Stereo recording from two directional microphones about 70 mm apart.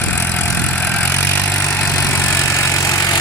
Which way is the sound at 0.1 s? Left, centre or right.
Left.